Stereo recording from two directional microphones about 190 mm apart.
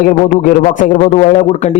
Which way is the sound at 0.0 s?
45° left (ahead or behind).